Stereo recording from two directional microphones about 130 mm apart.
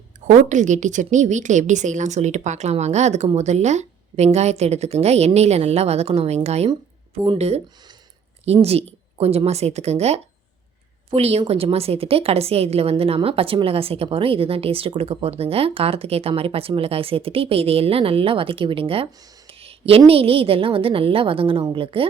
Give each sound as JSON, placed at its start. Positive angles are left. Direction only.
{"t": 0.3, "sound": "a woman's voice", "side_deg": -70}
{"t": 8.6, "sound": "a woman's voice", "side_deg": -50}
{"t": 19.5, "sound": "a sound", "side_deg": -50}
{"t": 20.1, "sound": "a woman's voice", "side_deg": -45}